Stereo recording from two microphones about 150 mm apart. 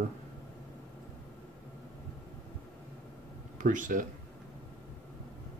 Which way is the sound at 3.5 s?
60° right (ahead or behind).